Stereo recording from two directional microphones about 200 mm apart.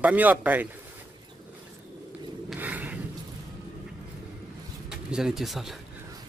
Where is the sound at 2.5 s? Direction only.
10° right (ahead or behind).